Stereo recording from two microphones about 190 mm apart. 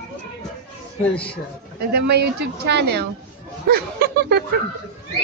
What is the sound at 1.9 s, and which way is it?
A woman's voice, 60° right (ahead or behind).